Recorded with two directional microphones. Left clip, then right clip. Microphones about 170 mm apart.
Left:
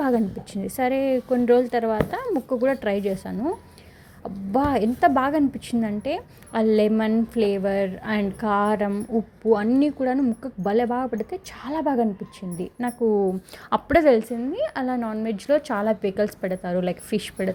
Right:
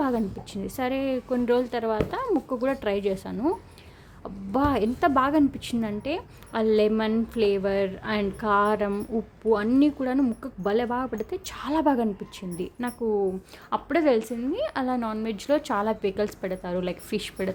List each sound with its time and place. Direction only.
0.0 s a woman's voice: 10° left (ahead or behind)
13.7 s a woman's voice: 30° left (ahead or behind)
14.2 s a woman's voice: 5° left (ahead or behind)